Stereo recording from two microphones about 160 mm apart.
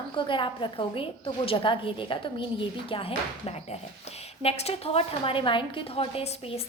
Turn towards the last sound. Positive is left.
turn(degrees=35)  # may be behind; listen again after turning